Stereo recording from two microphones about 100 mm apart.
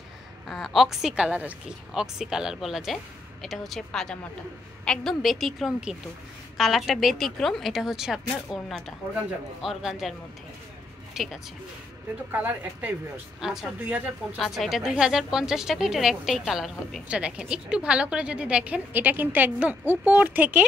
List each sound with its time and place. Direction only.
0.5 s a woman's voice: 5° left (ahead or behind)
11.2 s a woman's voice: 5° right (ahead or behind)
12.3 s a woman's voice: 15° right (ahead or behind)
13.4 s a woman's voice: 5° right (ahead or behind)
13.7 s a woman's voice: 15° right (ahead or behind)
14.4 s a woman's voice: centre (ahead or behind)